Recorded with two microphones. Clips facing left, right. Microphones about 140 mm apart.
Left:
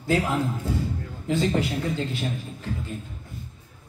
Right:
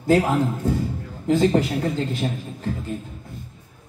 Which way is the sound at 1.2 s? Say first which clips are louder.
Right 6 dB; 40° right (ahead or behind).